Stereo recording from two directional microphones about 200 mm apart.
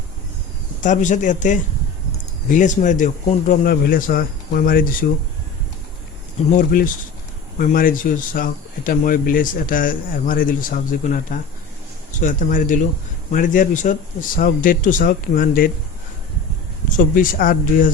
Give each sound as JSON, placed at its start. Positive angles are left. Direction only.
{"t": 0.8, "sound": "speech", "side_deg": 40}
{"t": 6.5, "sound": "speech", "side_deg": 45}
{"t": 17.0, "sound": "speech", "side_deg": 45}